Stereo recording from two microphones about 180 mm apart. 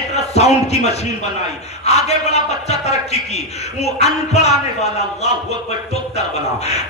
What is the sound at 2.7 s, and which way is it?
Speech, 35° left (ahead or behind).